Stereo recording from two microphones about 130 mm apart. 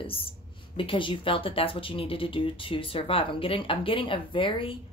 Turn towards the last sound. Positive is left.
turn(degrees=40)  # may be behind; listen again after turning